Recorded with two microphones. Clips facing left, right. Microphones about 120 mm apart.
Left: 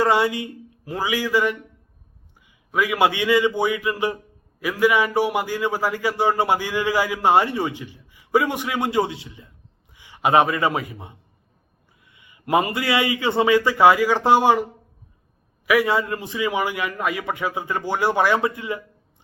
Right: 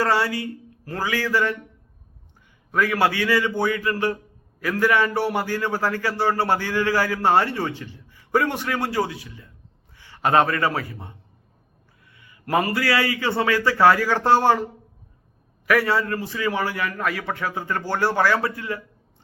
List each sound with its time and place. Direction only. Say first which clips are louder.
0.0 s a man's voice: left 2 dB; 20° left (ahead or behind)
2.7 s a man's voice: left 1 dB; 15° left (ahead or behind)
15.6 s a man's voice: left 1 dB; 10° left (ahead or behind)